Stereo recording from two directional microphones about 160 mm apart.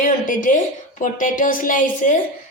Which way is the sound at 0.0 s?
55° left (ahead or behind).